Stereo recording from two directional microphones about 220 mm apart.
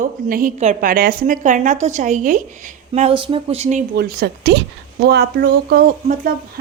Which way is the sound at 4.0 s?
45° right (ahead or behind).